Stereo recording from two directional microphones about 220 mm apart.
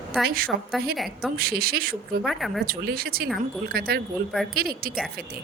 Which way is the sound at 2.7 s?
45° right (ahead or behind).